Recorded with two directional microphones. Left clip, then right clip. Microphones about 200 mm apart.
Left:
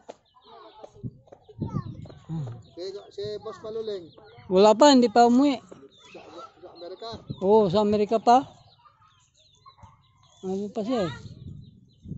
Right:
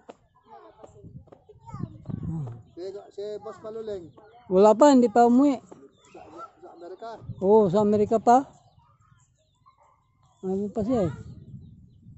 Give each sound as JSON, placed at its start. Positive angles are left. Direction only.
{"t": 0.7, "sound": "a sound", "side_deg": -35}
{"t": 2.7, "sound": "speech", "side_deg": -55}
{"t": 4.5, "sound": "speech", "side_deg": -10}
{"t": 7.4, "sound": "speech", "side_deg": -20}
{"t": 10.4, "sound": "speech", "side_deg": -20}